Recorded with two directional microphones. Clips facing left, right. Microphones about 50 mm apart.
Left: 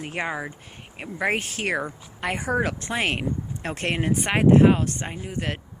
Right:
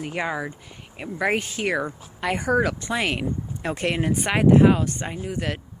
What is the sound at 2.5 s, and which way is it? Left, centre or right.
Speech, left.